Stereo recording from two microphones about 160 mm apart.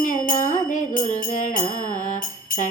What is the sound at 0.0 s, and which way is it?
Music, 50° left (ahead or behind).